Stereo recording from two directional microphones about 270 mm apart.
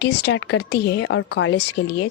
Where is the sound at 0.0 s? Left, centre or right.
Left.